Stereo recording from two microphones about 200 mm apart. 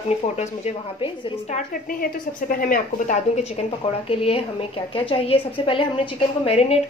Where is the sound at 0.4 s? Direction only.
35° left (ahead or behind).